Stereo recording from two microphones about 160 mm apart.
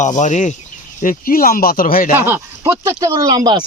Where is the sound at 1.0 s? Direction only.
60° left (ahead or behind).